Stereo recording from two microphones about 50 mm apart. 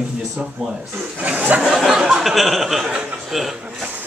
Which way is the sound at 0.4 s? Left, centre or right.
Right.